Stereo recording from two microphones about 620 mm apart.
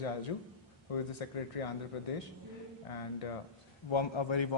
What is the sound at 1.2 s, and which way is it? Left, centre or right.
Speech, left.